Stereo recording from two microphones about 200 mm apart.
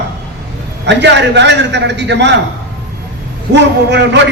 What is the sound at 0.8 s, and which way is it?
A man's voice, 60° right (ahead or behind).